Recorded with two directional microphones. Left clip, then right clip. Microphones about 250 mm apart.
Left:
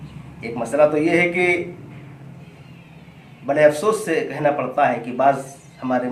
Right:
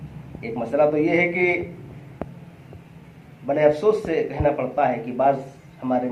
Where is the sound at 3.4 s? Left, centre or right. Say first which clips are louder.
Left 2 dB; left.